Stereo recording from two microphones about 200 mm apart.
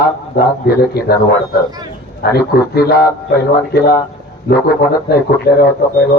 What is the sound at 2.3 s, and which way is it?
Speech, 50° left (ahead or behind).